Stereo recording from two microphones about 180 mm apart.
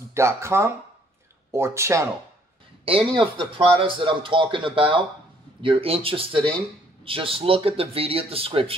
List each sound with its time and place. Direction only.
0.1 s speech: 15° right (ahead or behind)
2.8 s a man's voice: 30° right (ahead or behind)